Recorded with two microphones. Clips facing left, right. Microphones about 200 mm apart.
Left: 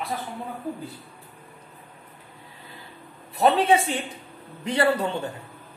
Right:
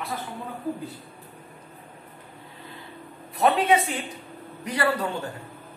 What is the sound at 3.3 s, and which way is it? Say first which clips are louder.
A woman's voice: left 1 dB; 30° left (ahead or behind).